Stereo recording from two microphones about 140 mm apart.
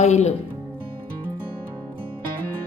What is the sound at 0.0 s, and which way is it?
Speech, 55° left (ahead or behind).